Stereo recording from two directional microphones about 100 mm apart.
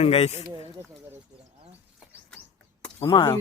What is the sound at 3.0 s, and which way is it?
Speech, 50° left (ahead or behind).